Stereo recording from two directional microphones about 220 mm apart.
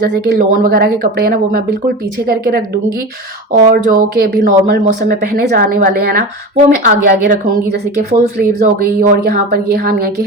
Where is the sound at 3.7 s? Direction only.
40° right (ahead or behind).